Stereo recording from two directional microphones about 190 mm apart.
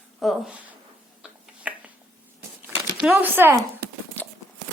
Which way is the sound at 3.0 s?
5° right (ahead or behind).